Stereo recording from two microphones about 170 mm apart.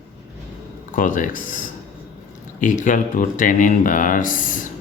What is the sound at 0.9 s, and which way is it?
Speech, 50° left (ahead or behind).